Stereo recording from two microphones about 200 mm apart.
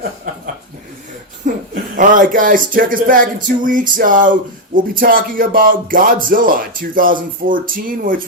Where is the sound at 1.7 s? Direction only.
40° right (ahead or behind).